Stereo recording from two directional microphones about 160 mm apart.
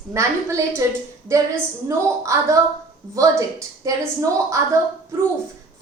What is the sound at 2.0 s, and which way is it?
Speech, 20° right (ahead or behind).